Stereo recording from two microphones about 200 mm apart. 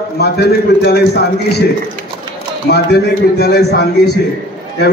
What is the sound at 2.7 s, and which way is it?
A man's voice, 55° left (ahead or behind).